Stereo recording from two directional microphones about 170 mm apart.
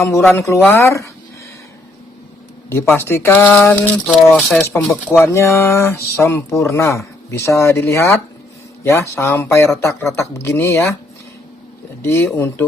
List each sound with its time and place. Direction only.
0.0 s speech: 15° left (ahead or behind)
2.6 s speech: 15° left (ahead or behind)
5.2 s speech: 15° left (ahead or behind)
12.0 s speech: 15° left (ahead or behind)